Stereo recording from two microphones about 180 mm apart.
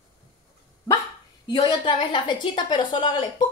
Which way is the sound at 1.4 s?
25° left (ahead or behind).